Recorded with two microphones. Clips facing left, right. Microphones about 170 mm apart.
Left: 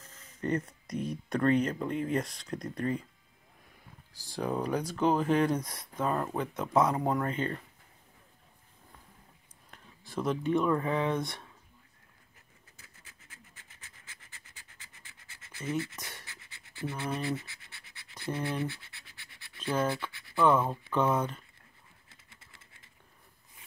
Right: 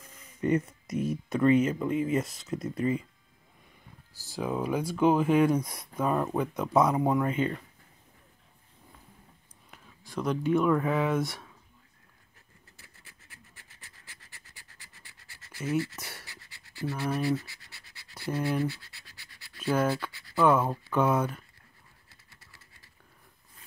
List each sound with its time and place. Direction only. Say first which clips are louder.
0.0 s speech: right 5 dB; 10° right (ahead or behind)
4.1 s speech: right 1 dB; 5° right (ahead or behind)
9.7 s speech: right 1 dB; centre (ahead or behind)
13.6 s scratch: right 1 dB; 20° left (ahead or behind)
19.6 s speech: right 3 dB; 5° right (ahead or behind)
22.3 s a sound: right 1 dB; 20° left (ahead or behind)